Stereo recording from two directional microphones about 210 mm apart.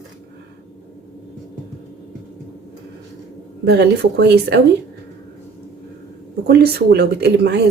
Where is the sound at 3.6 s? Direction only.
50° right (ahead or behind).